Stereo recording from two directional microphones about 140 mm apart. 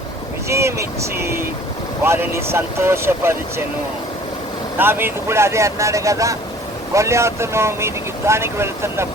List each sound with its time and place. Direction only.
0.4 s speech: 20° right (ahead or behind)
4.8 s speech: 15° right (ahead or behind)